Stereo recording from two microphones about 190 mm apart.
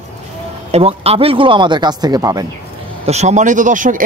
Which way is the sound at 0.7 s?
30° right (ahead or behind).